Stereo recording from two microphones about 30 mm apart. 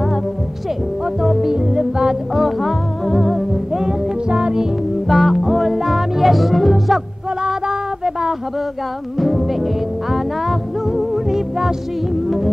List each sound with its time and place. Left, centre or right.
1.2 s music: centre
1.5 s music: right
2.3 s music: centre
4.3 s music: right
5.0 s music: centre
7.4 s music: right
9.2 s music: centre